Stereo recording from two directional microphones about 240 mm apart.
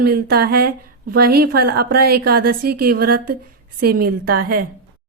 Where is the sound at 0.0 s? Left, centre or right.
Right.